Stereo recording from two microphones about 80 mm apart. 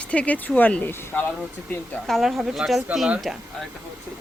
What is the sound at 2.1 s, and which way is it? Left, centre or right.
Speech, centre.